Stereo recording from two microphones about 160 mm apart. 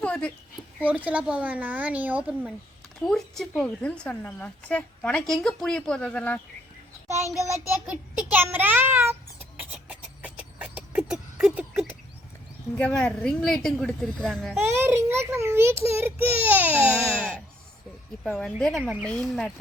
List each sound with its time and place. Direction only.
0.0 s a sound: 5° left (ahead or behind)
0.8 s a child's voice: 10° right (ahead or behind); by 6.4 s 10° left (ahead or behind)
7.9 s child singing: 10° right (ahead or behind)
12.7 s a woman's voice: 5° left (ahead or behind)
14.5 s a child's voice: 15° right (ahead or behind)
18.2 s a woman's voice: 5° left (ahead or behind)
18.8 s a child's voice: 10° right (ahead or behind)
19.0 s a woman's voice: 5° left (ahead or behind)